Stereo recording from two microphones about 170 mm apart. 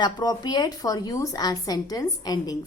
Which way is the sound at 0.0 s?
25° left (ahead or behind).